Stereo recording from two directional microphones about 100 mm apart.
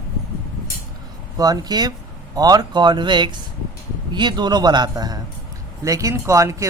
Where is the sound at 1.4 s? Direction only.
40° right (ahead or behind).